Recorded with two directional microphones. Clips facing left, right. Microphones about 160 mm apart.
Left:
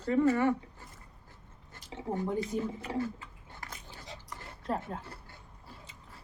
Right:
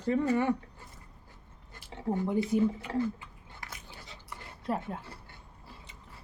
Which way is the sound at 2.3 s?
15° right (ahead or behind).